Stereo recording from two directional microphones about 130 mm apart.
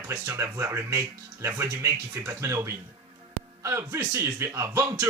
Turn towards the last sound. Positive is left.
turn(degrees=-20)  # may be behind; listen again after turning